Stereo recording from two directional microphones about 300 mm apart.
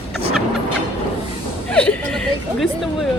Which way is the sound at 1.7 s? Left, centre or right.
Centre.